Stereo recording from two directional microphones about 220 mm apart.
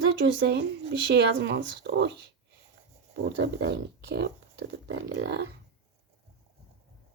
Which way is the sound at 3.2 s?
50° right (ahead or behind).